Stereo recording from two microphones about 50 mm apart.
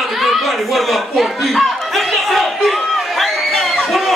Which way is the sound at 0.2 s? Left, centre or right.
Centre.